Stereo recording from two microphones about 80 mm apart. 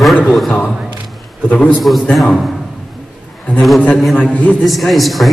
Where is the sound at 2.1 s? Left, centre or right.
Centre.